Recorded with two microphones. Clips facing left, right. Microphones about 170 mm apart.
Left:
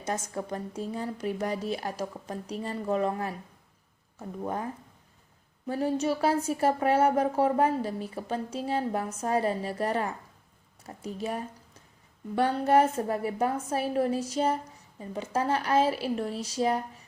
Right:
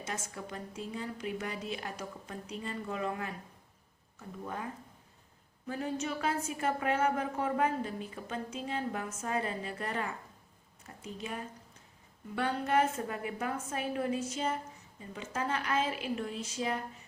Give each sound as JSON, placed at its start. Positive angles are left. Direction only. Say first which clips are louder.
{"t": 0.0, "sound": "a woman's voice", "louder": "left 8 dB", "side_deg": 40}